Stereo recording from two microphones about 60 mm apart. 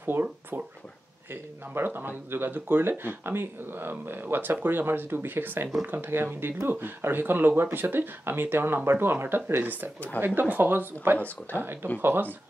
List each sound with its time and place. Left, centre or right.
0.0 s speech: right